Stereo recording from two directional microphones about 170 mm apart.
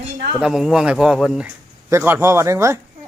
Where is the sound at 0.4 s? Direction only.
5° right (ahead or behind).